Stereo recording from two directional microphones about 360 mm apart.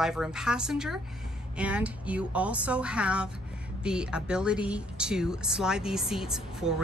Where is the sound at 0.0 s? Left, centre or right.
Centre.